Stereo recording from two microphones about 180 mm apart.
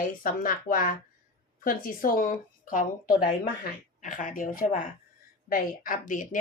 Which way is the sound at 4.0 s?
45° left (ahead or behind).